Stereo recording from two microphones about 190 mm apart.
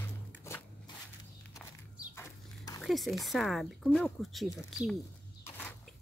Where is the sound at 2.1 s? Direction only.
15° left (ahead or behind).